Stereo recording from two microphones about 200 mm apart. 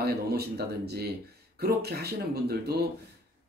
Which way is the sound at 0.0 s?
50° right (ahead or behind).